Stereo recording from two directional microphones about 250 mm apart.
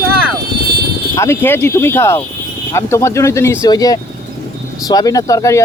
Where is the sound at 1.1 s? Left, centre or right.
Centre.